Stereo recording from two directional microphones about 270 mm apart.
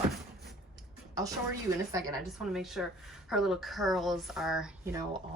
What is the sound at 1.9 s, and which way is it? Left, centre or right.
Speech, centre.